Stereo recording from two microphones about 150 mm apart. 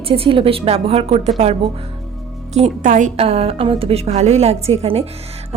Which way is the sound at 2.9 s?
55° right (ahead or behind).